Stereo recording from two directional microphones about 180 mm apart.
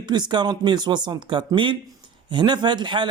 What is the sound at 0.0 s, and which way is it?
Speech, 25° right (ahead or behind).